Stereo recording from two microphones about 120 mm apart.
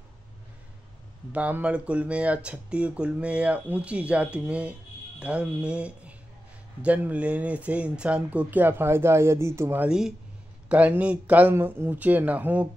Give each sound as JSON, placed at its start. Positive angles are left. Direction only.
{"t": 1.3, "sound": "speech", "side_deg": -10}
{"t": 9.8, "sound": "speech", "side_deg": -5}